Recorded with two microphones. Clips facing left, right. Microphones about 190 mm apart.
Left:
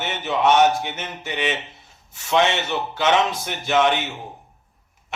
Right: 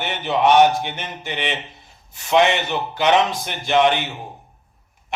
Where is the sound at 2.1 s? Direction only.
15° right (ahead or behind).